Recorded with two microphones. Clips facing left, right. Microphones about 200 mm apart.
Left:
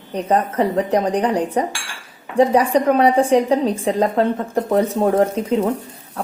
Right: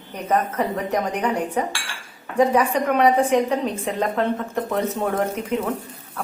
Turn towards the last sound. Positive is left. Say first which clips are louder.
# left 6 dB
turn(degrees=30)  # may be behind; listen again after turning